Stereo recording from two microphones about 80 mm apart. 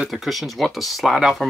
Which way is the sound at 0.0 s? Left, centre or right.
Centre.